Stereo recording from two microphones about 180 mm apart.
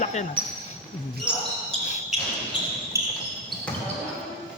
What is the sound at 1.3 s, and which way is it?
Speech, 5° right (ahead or behind).